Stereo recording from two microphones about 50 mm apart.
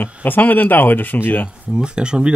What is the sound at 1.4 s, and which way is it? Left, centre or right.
Speech, centre.